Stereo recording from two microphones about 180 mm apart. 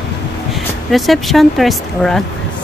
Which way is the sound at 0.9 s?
Centre (ahead or behind).